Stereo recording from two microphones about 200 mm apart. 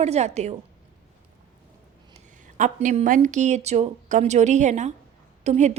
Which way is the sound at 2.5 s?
40° right (ahead or behind).